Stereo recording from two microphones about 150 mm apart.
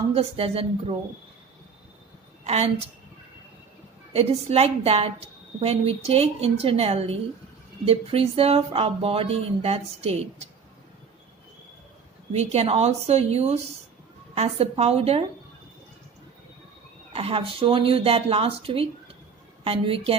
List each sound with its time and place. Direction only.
0.1 s speech: 40° right (ahead or behind)
4.1 s a woman's voice: 45° right (ahead or behind)
12.3 s a woman's voice: 45° right (ahead or behind)
17.1 s speech: 40° right (ahead or behind)